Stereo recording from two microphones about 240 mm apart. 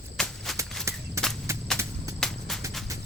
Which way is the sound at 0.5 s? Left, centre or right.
Centre.